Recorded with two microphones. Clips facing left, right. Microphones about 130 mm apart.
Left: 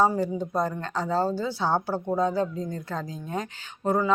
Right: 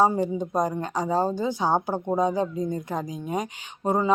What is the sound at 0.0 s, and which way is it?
Speech, 20° right (ahead or behind).